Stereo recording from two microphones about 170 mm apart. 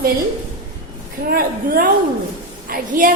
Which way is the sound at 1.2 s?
60° right (ahead or behind).